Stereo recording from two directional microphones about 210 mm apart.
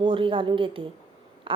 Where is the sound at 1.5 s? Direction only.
25° right (ahead or behind).